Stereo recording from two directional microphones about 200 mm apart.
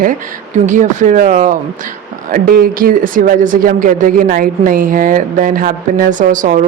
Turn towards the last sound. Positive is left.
turn(degrees=-40)  # may be behind; listen again after turning